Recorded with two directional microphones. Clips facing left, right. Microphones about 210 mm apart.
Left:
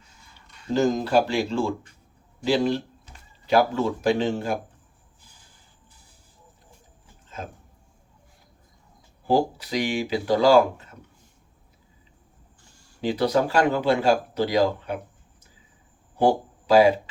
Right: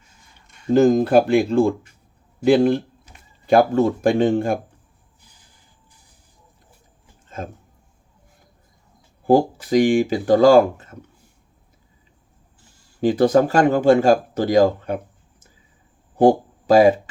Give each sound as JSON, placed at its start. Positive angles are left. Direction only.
{"t": 0.7, "sound": "a man's voice", "side_deg": -55}
{"t": 9.2, "sound": "speech", "side_deg": -50}
{"t": 13.0, "sound": "speech", "side_deg": -45}
{"t": 16.1, "sound": "a sound", "side_deg": -50}